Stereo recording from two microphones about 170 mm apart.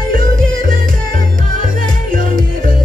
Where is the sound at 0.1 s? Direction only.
55° right (ahead or behind).